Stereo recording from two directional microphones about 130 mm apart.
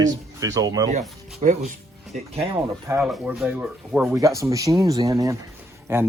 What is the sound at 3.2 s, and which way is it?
Speech, 10° right (ahead or behind).